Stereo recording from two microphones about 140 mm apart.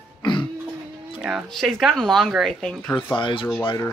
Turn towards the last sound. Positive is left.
turn(degrees=25)  # may be behind; listen again after turning